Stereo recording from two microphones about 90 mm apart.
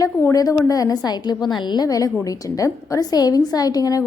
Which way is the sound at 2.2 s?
40° left (ahead or behind).